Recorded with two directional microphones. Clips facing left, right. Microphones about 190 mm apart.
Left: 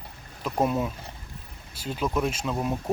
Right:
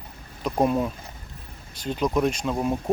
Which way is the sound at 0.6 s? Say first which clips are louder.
Right 3 dB; 5° left (ahead or behind).